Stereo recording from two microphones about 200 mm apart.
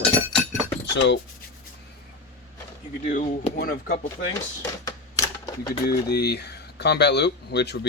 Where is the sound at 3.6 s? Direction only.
50° left (ahead or behind).